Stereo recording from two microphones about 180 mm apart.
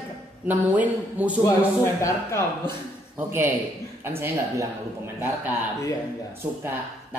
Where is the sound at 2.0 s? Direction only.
15° left (ahead or behind).